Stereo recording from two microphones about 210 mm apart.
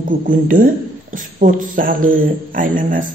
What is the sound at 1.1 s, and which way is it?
A man's voice, 40° right (ahead or behind).